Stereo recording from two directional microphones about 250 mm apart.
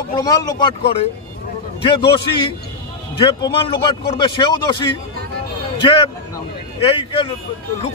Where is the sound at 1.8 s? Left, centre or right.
Left.